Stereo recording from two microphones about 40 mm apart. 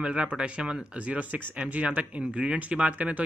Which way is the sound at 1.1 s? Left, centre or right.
Right.